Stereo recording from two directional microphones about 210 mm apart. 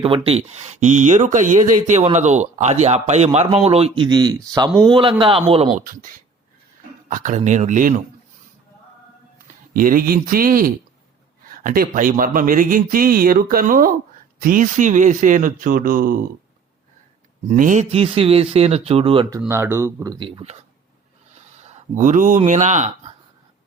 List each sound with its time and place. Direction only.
0.0 s speech: 25° right (ahead or behind)
5.8 s speech: 40° right (ahead or behind)
7.1 s speech: 35° right (ahead or behind)
9.7 s speech: 40° right (ahead or behind)
17.5 s speech: 35° right (ahead or behind)
19.4 s speech: 10° right (ahead or behind); by 20.6 s 25° right (ahead or behind)
21.9 s speech: 35° right (ahead or behind)